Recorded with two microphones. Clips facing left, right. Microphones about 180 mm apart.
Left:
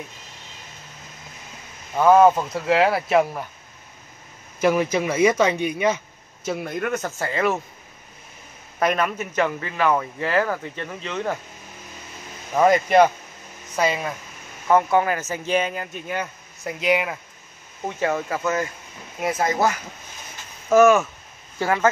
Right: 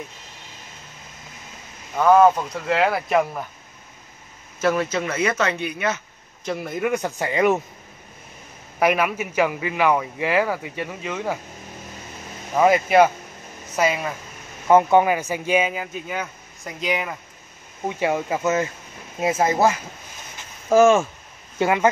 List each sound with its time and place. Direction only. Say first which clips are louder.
2.0 s speech: even; 5° left (ahead or behind)
4.6 s speech: left 2 dB; 15° left (ahead or behind)
6.4 s speech: right 1 dB; centre (ahead or behind); by 7.6 s 15° right (ahead or behind)
8.7 s speech: right 2 dB; 10° right (ahead or behind)
12.5 s speech: even; 5° right (ahead or behind)
14.7 s speech: right 3 dB; 20° right (ahead or behind); by 17.2 s 5° left (ahead or behind)
17.8 s speech: right 1 dB; 15° right (ahead or behind)
21.5 s speech: right 2 dB; 20° right (ahead or behind)